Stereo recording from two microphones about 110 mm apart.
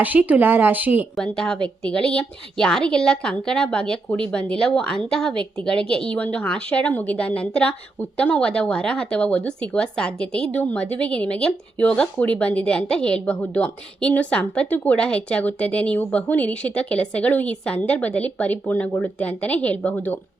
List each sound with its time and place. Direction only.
0.0 s a woman's voice: 15° right (ahead or behind)
1.1 s a woman's voice: 10° left (ahead or behind)